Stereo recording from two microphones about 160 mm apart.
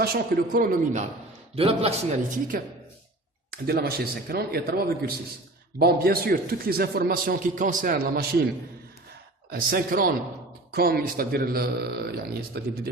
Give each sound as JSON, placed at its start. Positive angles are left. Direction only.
{"t": 0.0, "sound": "a man's voice", "side_deg": -65}
{"t": 1.5, "sound": "a man's voice", "side_deg": -35}
{"t": 2.5, "sound": "a man's voice", "side_deg": -65}
{"t": 9.5, "sound": "a man's voice", "side_deg": -65}